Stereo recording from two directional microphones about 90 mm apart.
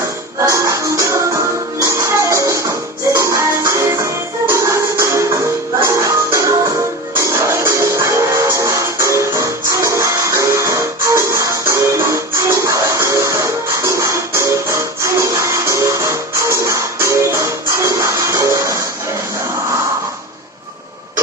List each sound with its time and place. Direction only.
0.5 s music: 35° right (ahead or behind)